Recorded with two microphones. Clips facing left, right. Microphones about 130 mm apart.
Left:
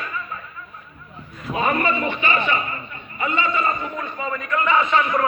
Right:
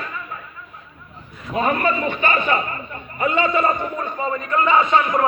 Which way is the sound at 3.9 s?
30° right (ahead or behind).